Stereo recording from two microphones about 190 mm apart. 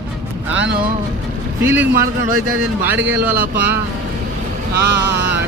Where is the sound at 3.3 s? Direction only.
50° right (ahead or behind).